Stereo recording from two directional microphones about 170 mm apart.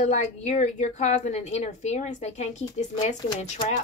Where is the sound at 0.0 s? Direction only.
40° left (ahead or behind).